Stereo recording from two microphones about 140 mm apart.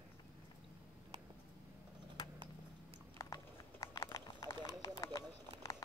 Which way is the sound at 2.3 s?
35° right (ahead or behind).